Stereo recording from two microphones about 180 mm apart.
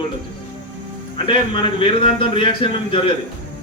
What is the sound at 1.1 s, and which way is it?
A man's voice, 30° left (ahead or behind).